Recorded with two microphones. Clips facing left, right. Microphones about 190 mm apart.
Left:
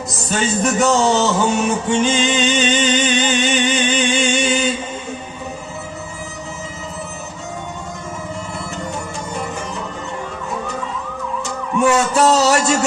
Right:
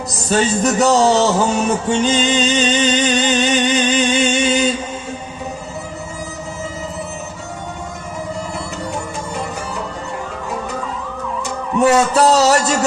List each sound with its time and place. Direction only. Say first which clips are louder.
0.3 s music: right 3 dB; 35° right (ahead or behind)
11.8 s a man's voice: right 2 dB; 40° right (ahead or behind)